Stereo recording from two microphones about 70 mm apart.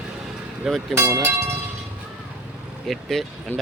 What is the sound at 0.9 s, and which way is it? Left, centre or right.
Speech, right.